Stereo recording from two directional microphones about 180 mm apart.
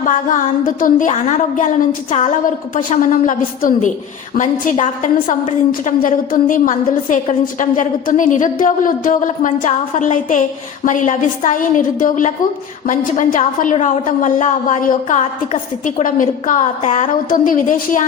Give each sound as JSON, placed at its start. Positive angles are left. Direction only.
{"t": 0.0, "sound": "a woman's voice", "side_deg": 45}